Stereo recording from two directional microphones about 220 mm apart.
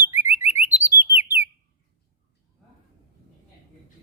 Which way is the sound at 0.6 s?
10° right (ahead or behind).